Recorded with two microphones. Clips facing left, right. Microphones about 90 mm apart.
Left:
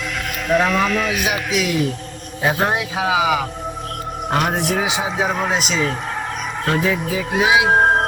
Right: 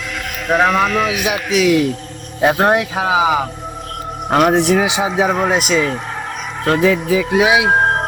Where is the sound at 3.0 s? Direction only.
35° right (ahead or behind).